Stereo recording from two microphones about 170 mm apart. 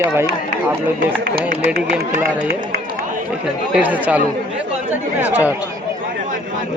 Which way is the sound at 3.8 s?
10° right (ahead or behind).